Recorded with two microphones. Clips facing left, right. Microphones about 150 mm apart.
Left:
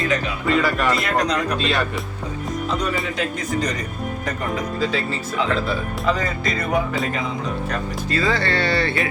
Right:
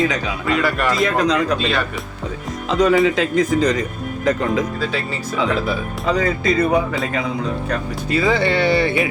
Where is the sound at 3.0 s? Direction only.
90° right.